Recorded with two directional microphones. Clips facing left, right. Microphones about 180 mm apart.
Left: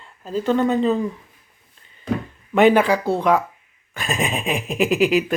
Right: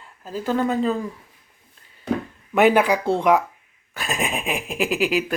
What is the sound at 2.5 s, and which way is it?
Speech, 10° right (ahead or behind).